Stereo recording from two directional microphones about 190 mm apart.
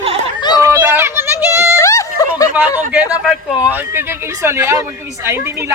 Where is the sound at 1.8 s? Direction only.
15° left (ahead or behind).